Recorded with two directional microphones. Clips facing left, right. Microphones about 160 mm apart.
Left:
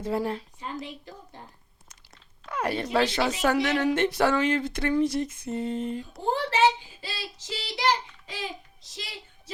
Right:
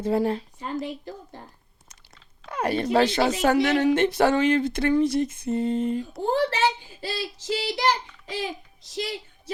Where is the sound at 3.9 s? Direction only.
25° right (ahead or behind).